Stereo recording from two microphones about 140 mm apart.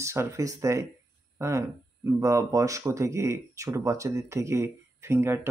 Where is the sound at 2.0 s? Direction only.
20° right (ahead or behind).